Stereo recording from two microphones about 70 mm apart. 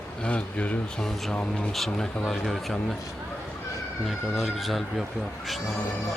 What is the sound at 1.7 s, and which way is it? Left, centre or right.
Speech, centre.